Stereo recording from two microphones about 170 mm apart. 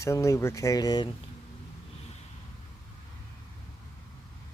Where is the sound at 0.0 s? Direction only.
15° left (ahead or behind).